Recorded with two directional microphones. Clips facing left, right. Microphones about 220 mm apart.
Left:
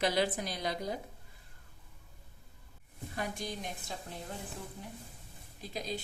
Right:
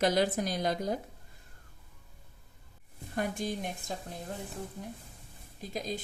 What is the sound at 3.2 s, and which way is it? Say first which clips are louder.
Speech: right 6 dB; 50° right (ahead or behind).